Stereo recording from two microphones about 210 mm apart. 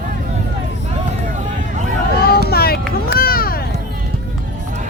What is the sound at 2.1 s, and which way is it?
Vehicle, 50° left (ahead or behind).